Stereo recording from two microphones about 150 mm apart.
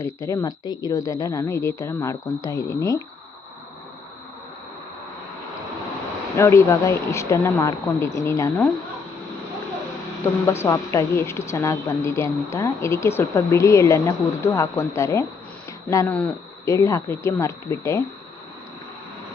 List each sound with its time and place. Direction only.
0.0 s a woman's voice: 20° left (ahead or behind)
6.3 s a woman's voice: 20° left (ahead or behind)
10.4 s a woman's voice: 15° left (ahead or behind)
16.0 s speech: 10° left (ahead or behind)
16.6 s a woman's voice: 20° left (ahead or behind)